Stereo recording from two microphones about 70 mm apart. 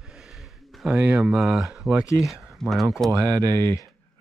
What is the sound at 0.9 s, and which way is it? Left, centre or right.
Speech, centre.